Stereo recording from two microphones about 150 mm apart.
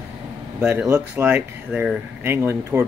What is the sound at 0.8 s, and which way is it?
Speech, 20° right (ahead or behind).